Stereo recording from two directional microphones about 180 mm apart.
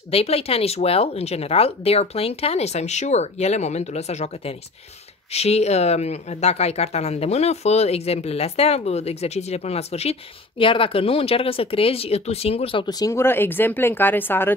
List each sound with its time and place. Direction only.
0.1 s speech: 35° left (ahead or behind); by 14.5 s 10° left (ahead or behind)